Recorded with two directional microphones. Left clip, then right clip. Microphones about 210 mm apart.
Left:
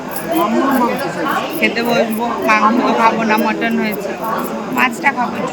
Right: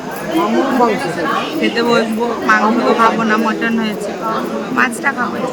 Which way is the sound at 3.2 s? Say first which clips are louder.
Even; 20° right (ahead or behind).